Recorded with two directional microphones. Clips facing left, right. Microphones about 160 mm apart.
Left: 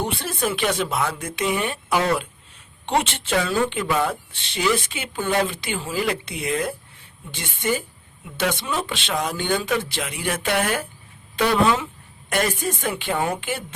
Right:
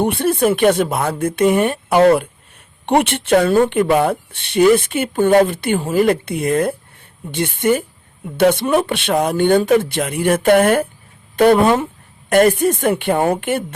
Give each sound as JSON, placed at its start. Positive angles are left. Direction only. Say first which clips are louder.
{"t": 0.0, "sound": "speech", "louder": "right 10 dB", "side_deg": -55}